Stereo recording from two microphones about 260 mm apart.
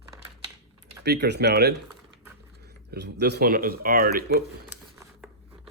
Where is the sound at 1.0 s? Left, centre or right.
Right.